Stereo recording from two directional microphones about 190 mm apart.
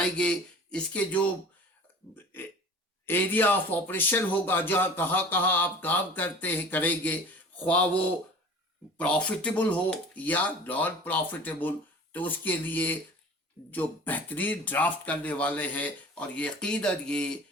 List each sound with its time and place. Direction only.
0.0 s a man's voice: 5° left (ahead or behind)